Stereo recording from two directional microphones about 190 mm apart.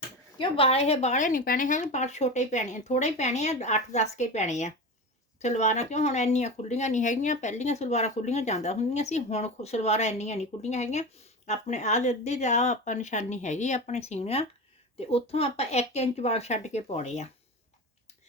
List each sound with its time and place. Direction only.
0.3 s speech: 30° left (ahead or behind)